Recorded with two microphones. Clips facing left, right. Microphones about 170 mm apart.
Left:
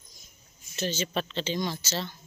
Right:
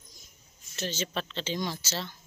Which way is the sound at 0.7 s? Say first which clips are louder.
Left 3 dB; 5° left (ahead or behind).